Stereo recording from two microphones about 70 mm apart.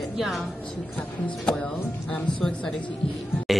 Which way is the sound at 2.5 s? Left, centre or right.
Centre.